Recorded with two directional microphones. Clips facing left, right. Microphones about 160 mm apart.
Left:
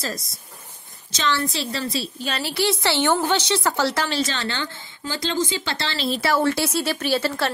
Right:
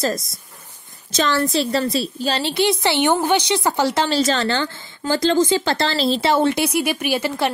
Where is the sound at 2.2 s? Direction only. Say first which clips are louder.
Right 4 dB; 25° right (ahead or behind).